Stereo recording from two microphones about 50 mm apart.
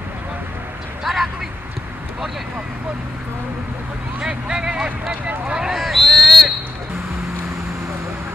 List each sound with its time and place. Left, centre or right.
1.0 s vehicle: centre
4.2 s speech: centre
5.6 s a sound: centre